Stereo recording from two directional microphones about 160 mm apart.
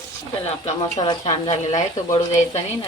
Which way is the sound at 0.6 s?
35° left (ahead or behind).